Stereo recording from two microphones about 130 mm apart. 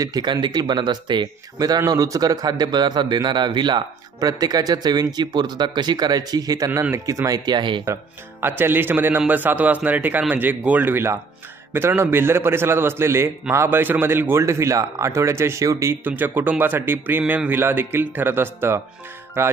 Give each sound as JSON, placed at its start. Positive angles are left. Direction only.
{"t": 0.0, "sound": "speech", "side_deg": -30}
{"t": 7.8, "sound": "a man's voice", "side_deg": -20}
{"t": 19.4, "sound": "music", "side_deg": -20}